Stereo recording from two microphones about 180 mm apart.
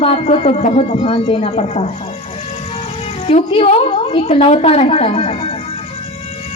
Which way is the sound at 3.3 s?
35° left (ahead or behind).